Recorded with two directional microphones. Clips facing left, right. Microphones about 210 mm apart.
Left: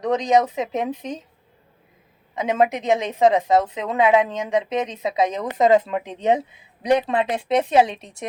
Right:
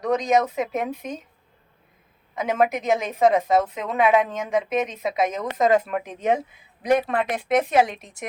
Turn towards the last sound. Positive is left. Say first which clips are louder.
# left 2 dB
turn(degrees=25)  # may be behind; listen again after turning